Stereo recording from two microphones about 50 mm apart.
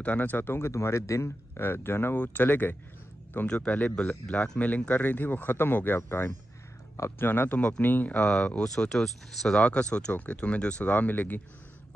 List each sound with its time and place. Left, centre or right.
0.0 s speech: left
0.7 s speech: left
1.6 s speech: left
2.1 s speech: left
3.4 s speech: left
3.7 s speech: left
7.2 s speech: left
7.5 s speech: left
7.8 s speech: left
8.2 s speech: centre
9.6 s speech: left